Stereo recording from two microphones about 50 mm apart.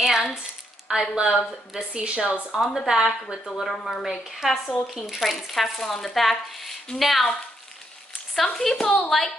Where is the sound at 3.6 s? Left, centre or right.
Centre.